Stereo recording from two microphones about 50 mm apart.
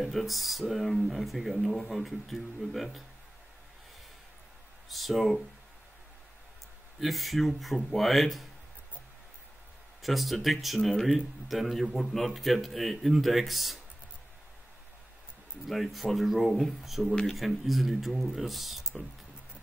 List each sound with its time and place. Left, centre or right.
0.0 s speech: centre
4.8 s speech: centre
7.0 s speech: centre
10.0 s speech: centre
15.6 s speech: centre